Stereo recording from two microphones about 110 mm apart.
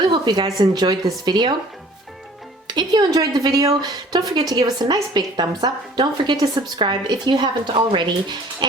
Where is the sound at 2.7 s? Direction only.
40° right (ahead or behind).